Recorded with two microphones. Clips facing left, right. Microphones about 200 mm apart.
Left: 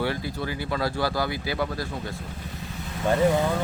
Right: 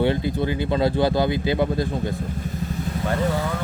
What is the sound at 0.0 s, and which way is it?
Speech, 20° right (ahead or behind).